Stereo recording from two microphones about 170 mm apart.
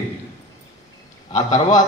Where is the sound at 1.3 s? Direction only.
45° left (ahead or behind).